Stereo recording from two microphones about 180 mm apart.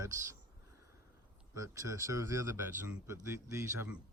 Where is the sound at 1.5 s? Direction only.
15° right (ahead or behind).